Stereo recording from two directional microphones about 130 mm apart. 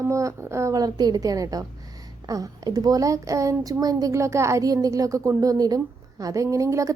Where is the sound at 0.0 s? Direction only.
25° right (ahead or behind).